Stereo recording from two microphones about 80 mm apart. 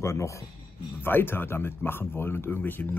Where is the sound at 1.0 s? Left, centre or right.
Left.